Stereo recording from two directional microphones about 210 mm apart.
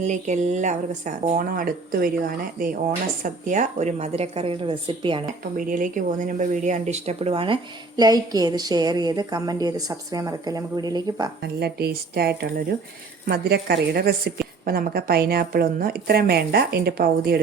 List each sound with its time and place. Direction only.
0.0 s speech: 35° right (ahead or behind)
5.5 s speech: 40° right (ahead or behind); by 11.3 s 20° right (ahead or behind)
11.6 s a woman's voice: 50° right (ahead or behind)